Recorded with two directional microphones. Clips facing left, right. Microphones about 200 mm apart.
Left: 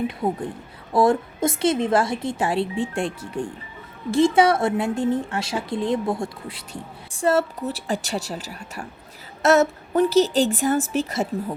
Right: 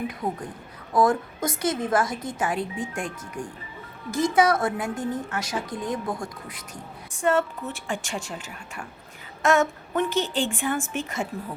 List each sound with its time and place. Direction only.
0.1 s a woman's voice: 25° left (ahead or behind)